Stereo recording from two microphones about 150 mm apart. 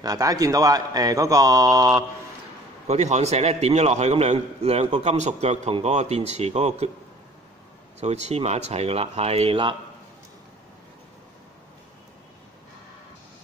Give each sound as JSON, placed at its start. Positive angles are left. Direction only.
{"t": 0.0, "sound": "a man's voice", "side_deg": -25}
{"t": 2.9, "sound": "a man's voice", "side_deg": -50}
{"t": 8.0, "sound": "a man's voice", "side_deg": -45}